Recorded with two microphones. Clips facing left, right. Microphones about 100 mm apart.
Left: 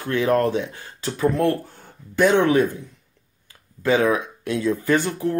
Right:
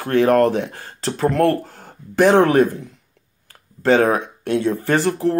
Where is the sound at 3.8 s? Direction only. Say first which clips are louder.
Right 4 dB; 55° right (ahead or behind).